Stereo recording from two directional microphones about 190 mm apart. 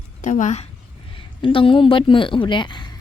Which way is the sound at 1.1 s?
25° left (ahead or behind).